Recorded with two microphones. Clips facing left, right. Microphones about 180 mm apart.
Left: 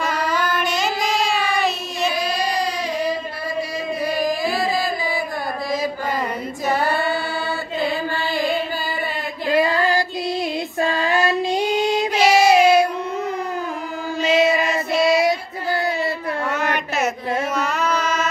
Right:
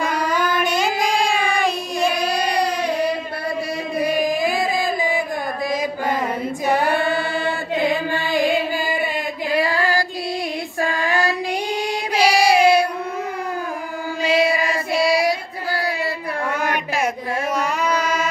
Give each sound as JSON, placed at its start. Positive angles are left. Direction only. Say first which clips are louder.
{"t": 0.6, "sound": "female singing", "louder": "right 2 dB", "side_deg": -10}
{"t": 2.4, "sound": "a sound", "louder": "right 2 dB", "side_deg": -70}
{"t": 4.4, "sound": "chant", "louder": "right 1 dB", "side_deg": -20}
{"t": 8.1, "sound": "music", "louder": "right 2 dB", "side_deg": -15}
{"t": 9.5, "sound": "female singing", "louder": "left 3 dB", "side_deg": 20}
{"t": 10.8, "sound": "child singing", "louder": "left 1 dB", "side_deg": 20}
{"t": 14.2, "sound": "choir", "louder": "left 1 dB", "side_deg": 20}
{"t": 15.0, "sound": "child singing", "louder": "left 1 dB", "side_deg": 20}
{"t": 17.6, "sound": "a sound", "louder": "right 1 dB", "side_deg": -10}